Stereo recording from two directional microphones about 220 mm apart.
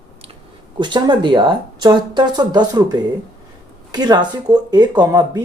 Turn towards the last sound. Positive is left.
turn(degrees=-20)  # may be behind; listen again after turning